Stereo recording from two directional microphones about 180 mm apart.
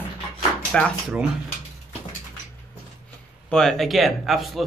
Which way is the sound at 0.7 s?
5° left (ahead or behind).